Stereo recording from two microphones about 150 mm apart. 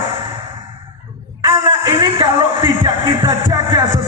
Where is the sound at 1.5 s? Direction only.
30° right (ahead or behind).